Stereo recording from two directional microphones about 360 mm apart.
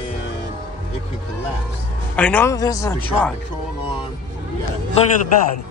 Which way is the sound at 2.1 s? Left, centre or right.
Centre.